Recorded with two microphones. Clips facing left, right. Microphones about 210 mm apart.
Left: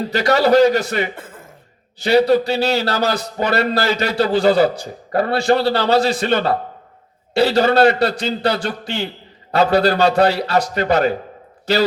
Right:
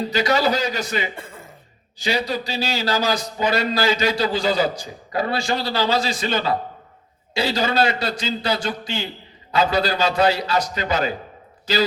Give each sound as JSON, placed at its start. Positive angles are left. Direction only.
{"t": 0.1, "sound": "a man's voice", "side_deg": 60}